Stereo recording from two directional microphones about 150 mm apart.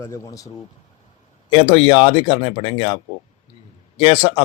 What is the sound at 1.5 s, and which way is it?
Speech, 35° left (ahead or behind).